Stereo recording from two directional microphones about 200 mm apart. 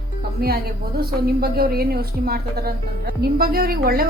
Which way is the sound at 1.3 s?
50° right (ahead or behind).